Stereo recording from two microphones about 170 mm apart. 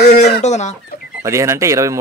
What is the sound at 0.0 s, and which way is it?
Chicken, 45° left (ahead or behind).